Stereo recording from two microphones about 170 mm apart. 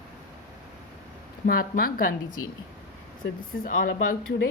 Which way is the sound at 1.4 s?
60° left (ahead or behind).